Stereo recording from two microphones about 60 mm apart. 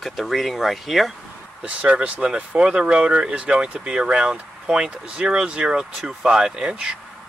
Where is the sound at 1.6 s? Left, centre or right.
Right.